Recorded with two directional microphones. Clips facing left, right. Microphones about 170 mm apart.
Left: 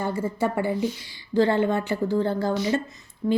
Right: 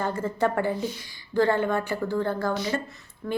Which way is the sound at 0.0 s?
10° left (ahead or behind).